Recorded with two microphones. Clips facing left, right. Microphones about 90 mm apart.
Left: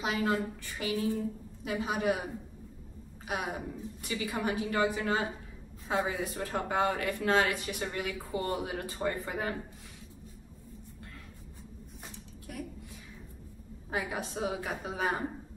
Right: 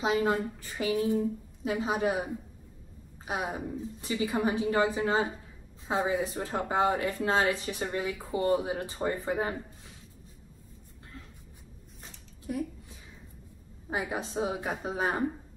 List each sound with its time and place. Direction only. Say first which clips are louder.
0.0 s a woman's voice: right 3 dB; 20° right (ahead or behind)
3.3 s a woman's voice: right 2 dB; 25° right (ahead or behind)
13.8 s a woman's voice: right 2 dB; 25° right (ahead or behind)